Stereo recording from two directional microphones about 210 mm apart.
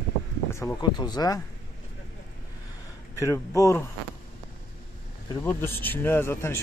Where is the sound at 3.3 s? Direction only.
15° left (ahead or behind).